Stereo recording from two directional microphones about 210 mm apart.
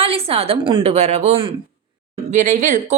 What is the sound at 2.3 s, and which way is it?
Speech, 35° right (ahead or behind).